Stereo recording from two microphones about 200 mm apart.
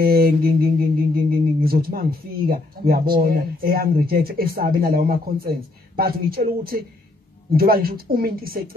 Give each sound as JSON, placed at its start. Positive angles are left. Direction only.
{"t": 0.0, "sound": "mantra", "side_deg": -50}